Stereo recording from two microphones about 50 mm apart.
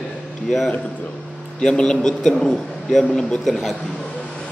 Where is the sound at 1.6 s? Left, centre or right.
Centre.